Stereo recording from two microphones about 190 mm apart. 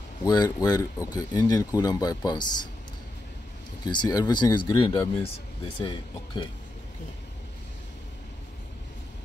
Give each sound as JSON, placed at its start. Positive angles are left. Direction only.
{"t": 0.2, "sound": "speech", "side_deg": 20}
{"t": 3.8, "sound": "speech", "side_deg": 20}